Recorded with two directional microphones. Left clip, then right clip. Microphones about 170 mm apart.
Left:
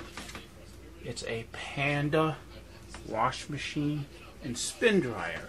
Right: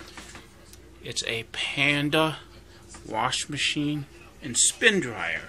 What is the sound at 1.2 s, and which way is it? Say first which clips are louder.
Speech: right 8 dB; 20° right (ahead or behind).